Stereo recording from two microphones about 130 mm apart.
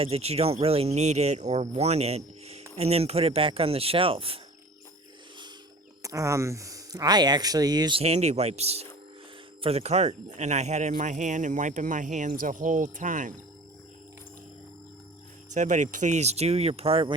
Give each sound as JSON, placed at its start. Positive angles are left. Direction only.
{"t": 0.0, "sound": "speech", "side_deg": -50}
{"t": 6.0, "sound": "speech", "side_deg": -25}
{"t": 7.9, "sound": "speech", "side_deg": -55}
{"t": 15.5, "sound": "speech", "side_deg": -70}